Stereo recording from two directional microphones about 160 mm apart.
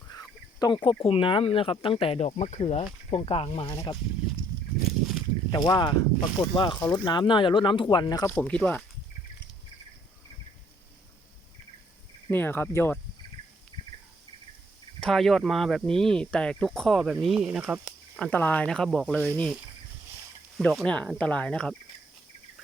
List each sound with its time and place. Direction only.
0.1 s a sound: 25° left (ahead or behind)
1.0 s speech: 35° left (ahead or behind)
4.9 s a sound: centre (ahead or behind)
5.5 s speech: 30° left (ahead or behind)
8.2 s speech: 10° left (ahead or behind)
12.3 s speech: 10° left (ahead or behind)
15.0 s speech: centre (ahead or behind)
18.2 s speech: 10° left (ahead or behind)
20.6 s speech: 5° left (ahead or behind)